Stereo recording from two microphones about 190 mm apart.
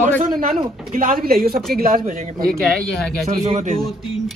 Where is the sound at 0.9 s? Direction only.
50° right (ahead or behind).